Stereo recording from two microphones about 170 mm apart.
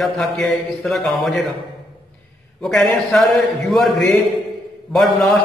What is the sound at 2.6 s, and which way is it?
A man's voice, centre (ahead or behind).